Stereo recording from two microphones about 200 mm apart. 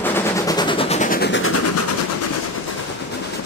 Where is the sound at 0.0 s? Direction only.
15° left (ahead or behind); by 1.3 s 45° left (ahead or behind).